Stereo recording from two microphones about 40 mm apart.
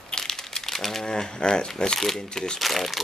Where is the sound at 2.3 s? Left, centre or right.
Centre.